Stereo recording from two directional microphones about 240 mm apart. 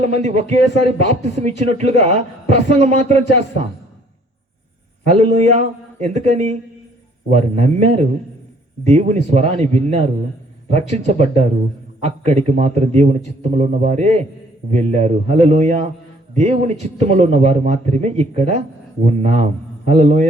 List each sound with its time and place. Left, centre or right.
0.0 s speech: right
5.0 s speech: right